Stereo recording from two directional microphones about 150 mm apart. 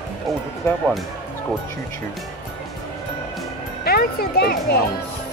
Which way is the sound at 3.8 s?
90° left.